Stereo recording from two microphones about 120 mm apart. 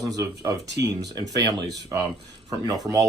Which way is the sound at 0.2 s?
30° right (ahead or behind).